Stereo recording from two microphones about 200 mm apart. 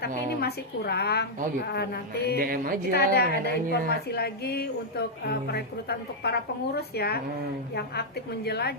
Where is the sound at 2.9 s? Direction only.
50° left (ahead or behind).